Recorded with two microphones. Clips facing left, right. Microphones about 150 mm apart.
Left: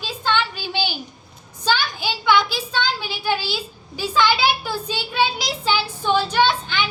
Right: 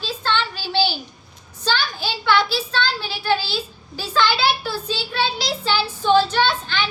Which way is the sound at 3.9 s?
15° left (ahead or behind).